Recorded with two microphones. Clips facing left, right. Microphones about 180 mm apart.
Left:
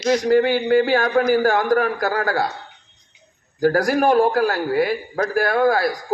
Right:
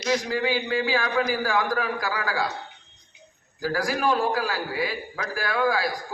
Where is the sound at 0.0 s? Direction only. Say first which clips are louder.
Left 9 dB; 55° left (ahead or behind).